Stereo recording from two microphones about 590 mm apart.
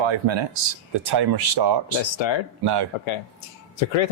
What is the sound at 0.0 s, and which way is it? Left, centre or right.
Speech, right.